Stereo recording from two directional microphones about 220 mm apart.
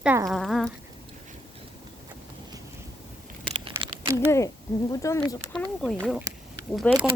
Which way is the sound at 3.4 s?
25° right (ahead or behind).